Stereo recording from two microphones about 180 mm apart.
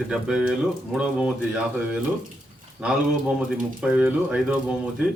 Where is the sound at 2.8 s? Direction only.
5° right (ahead or behind).